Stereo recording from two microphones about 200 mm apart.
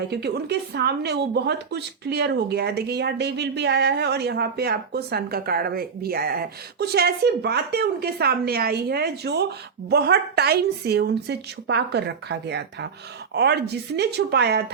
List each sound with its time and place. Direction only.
0.1 s a woman's voice: 55° right (ahead or behind)